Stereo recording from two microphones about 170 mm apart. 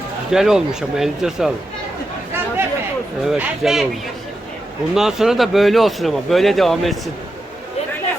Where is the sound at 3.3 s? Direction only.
Centre (ahead or behind).